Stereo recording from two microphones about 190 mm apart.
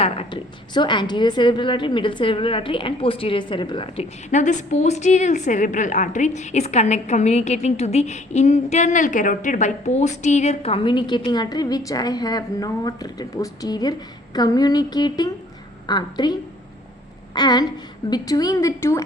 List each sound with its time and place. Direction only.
0.0 s a woman's voice: 30° left (ahead or behind)
4.3 s a woman's voice: 40° left (ahead or behind); by 19.0 s 15° left (ahead or behind)